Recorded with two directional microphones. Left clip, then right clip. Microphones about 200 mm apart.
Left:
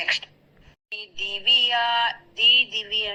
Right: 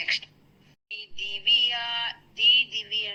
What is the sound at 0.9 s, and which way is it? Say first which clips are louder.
Synthetic singing: left 4 dB; centre (ahead or behind).